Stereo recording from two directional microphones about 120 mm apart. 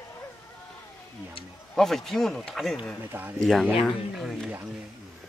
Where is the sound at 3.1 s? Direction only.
15° right (ahead or behind).